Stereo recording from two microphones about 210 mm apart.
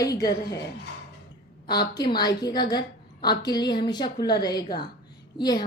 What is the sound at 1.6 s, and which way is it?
A woman's voice, 20° left (ahead or behind).